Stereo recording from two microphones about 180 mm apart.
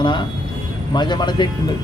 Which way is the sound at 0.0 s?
25° left (ahead or behind).